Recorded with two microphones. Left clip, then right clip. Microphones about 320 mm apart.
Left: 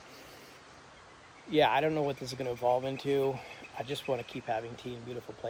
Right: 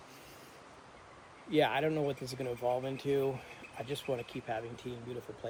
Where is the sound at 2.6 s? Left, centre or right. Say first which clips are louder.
Left 5 dB; left.